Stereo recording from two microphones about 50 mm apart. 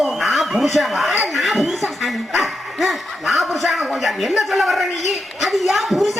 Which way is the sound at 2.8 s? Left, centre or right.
Centre.